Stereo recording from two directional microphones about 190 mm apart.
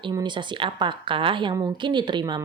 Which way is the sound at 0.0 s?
25° right (ahead or behind).